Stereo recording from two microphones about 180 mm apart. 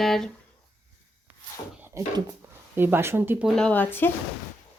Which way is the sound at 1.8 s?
15° right (ahead or behind).